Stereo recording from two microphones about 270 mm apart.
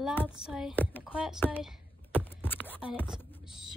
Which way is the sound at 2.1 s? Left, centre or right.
Centre.